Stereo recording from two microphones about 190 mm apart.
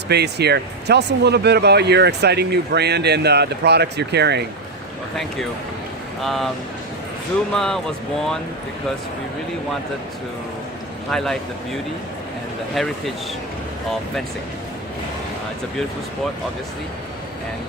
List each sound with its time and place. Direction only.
0.1 s speech: 60° right (ahead or behind)
6.2 s speech: centre (ahead or behind)
7.5 s speech: 5° left (ahead or behind)
11.1 s speech: centre (ahead or behind)